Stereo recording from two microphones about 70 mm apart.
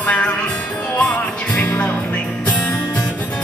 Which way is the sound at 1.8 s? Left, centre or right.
Left.